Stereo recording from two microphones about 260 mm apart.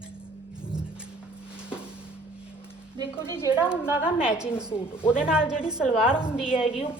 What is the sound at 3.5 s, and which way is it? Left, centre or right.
Music, centre.